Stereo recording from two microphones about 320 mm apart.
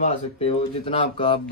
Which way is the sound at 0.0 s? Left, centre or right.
Centre.